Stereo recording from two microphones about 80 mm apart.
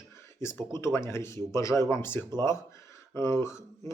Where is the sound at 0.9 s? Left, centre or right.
Left.